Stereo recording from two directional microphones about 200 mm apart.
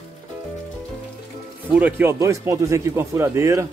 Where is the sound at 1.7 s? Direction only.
10° right (ahead or behind).